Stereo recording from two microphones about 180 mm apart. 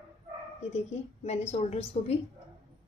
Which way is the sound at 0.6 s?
35° left (ahead or behind).